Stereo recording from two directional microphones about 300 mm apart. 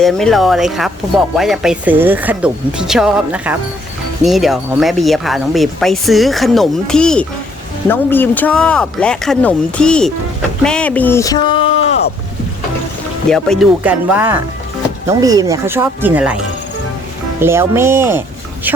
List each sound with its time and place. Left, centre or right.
0.0 s speech: centre
13.3 s speech: centre
17.4 s speech: centre